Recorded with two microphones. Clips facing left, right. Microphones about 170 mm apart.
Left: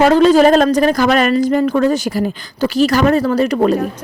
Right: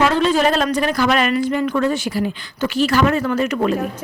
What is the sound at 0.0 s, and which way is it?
A woman's voice, 40° left (ahead or behind).